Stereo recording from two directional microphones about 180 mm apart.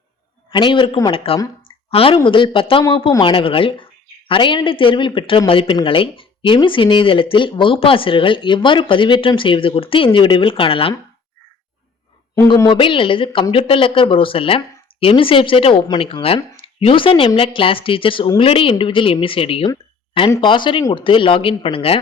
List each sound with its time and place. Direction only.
0.5 s speech: 25° left (ahead or behind)
12.3 s speech: 20° left (ahead or behind)